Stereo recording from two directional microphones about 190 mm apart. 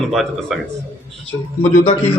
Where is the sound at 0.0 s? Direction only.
Centre (ahead or behind).